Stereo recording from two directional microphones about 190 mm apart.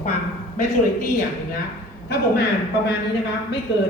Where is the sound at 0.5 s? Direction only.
40° left (ahead or behind).